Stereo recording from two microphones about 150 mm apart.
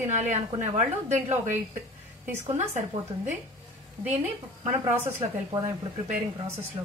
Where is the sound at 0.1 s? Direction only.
55° right (ahead or behind).